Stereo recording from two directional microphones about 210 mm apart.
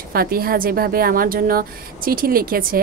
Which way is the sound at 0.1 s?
45° right (ahead or behind).